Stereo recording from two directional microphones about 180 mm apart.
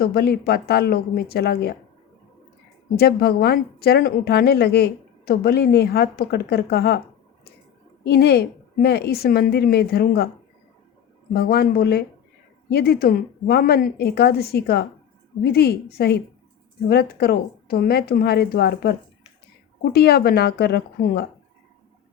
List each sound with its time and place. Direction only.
0.0 s a woman's voice: 60° left (ahead or behind)
2.9 s a woman's voice: 60° left (ahead or behind)
8.0 s a woman's voice: 65° left (ahead or behind)
11.3 s a woman's voice: 60° left (ahead or behind)